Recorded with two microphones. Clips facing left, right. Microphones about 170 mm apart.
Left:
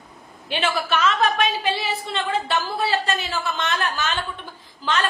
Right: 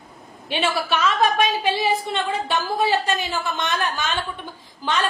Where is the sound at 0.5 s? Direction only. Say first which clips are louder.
Right 1 dB; 10° right (ahead or behind).